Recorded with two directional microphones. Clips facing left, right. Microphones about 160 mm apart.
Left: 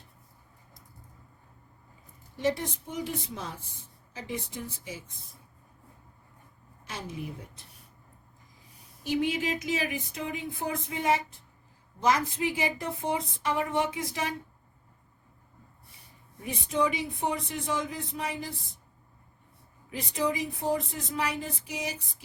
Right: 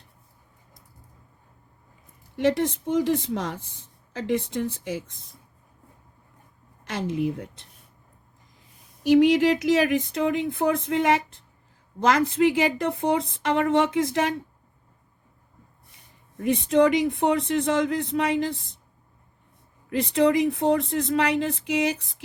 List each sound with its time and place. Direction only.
2.4 s speech: 70° right (ahead or behind)
6.8 s speech: 90° right
9.0 s a woman's voice: 80° right
16.4 s a woman's voice: 75° right (ahead or behind)
19.9 s a woman's voice: 70° right (ahead or behind)